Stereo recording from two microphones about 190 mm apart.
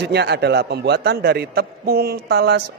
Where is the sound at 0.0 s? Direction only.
60° right (ahead or behind).